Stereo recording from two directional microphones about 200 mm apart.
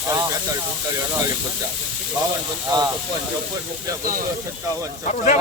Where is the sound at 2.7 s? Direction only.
20° right (ahead or behind).